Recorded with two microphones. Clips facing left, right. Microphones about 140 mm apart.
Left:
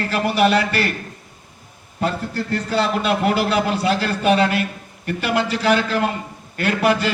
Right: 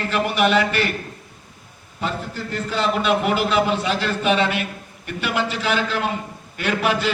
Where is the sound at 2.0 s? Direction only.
40° left (ahead or behind).